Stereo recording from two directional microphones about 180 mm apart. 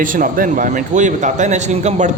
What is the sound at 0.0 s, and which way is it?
Speech, 50° right (ahead or behind).